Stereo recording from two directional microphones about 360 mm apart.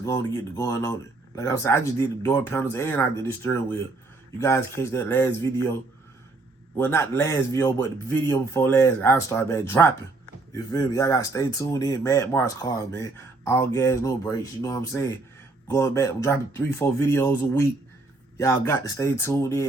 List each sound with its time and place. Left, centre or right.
0.0 s speech: centre
6.7 s speech: centre